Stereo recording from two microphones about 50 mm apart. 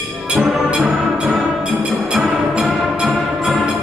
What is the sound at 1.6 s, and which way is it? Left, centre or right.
Music, right.